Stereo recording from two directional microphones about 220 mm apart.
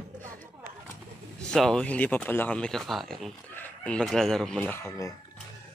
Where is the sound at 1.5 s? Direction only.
5° left (ahead or behind).